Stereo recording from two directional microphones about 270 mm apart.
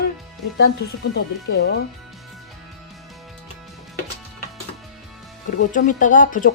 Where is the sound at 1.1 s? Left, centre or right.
Left.